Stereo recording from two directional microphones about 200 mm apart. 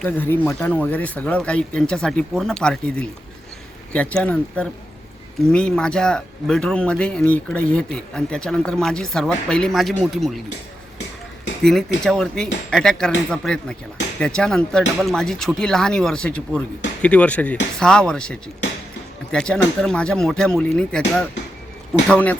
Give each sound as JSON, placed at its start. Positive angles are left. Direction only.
{"t": 0.0, "sound": "speech", "side_deg": 10}
{"t": 11.6, "sound": "speech", "side_deg": 0}